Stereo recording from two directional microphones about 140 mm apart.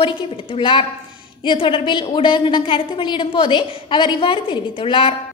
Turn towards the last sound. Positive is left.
turn(degrees=35)  # may be behind; listen again after turning